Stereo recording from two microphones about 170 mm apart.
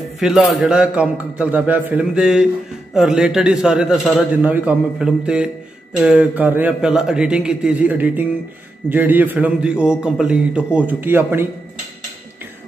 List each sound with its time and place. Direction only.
0.2 s a man's voice: centre (ahead or behind)